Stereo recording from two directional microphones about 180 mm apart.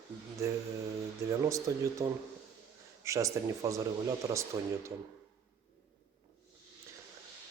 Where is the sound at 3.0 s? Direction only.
15° right (ahead or behind).